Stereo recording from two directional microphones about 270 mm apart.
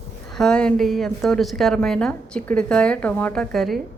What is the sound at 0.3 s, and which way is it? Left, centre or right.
A woman's voice, centre.